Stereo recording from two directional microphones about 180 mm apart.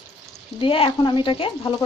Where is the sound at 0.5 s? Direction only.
30° left (ahead or behind).